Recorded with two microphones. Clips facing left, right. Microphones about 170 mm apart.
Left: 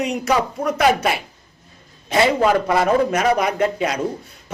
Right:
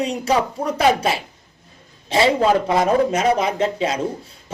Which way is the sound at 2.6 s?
25° right (ahead or behind).